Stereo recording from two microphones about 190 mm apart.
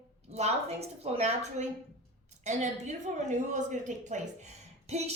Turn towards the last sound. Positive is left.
turn(degrees=-35)  # may be behind; listen again after turning